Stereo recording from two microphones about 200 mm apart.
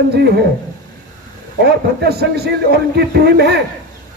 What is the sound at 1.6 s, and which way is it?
Speech, 55° right (ahead or behind).